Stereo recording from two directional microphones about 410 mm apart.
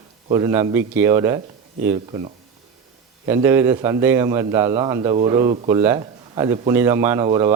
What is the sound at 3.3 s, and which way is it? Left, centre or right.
A man's voice, centre.